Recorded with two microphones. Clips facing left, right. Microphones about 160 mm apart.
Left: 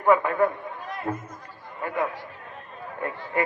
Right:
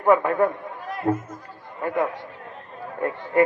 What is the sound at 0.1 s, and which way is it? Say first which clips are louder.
Speech: right 2 dB; 40° right (ahead or behind).